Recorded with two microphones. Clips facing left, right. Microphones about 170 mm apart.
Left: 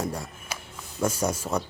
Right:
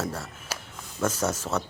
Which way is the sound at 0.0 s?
15° left (ahead or behind).